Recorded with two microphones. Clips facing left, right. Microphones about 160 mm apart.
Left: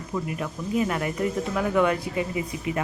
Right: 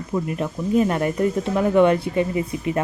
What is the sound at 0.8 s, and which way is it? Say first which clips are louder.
Speech: right 5 dB; 35° right (ahead or behind).